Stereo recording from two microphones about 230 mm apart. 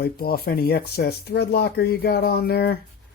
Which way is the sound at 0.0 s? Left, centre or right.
Left.